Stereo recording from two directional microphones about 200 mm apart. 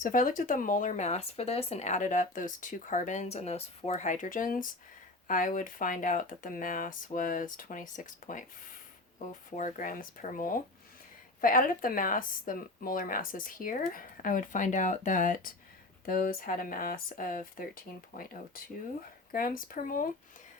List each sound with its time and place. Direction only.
0.0 s speech: 40° left (ahead or behind)